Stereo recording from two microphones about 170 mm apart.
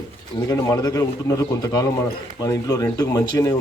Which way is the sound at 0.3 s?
20° left (ahead or behind).